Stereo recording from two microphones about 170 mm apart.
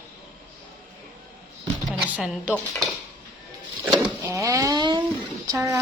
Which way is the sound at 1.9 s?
5° right (ahead or behind).